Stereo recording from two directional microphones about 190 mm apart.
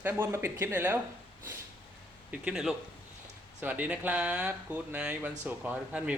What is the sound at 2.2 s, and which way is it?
Mantra, 5° right (ahead or behind).